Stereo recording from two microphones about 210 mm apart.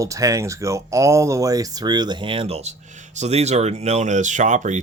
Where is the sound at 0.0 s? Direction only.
15° right (ahead or behind).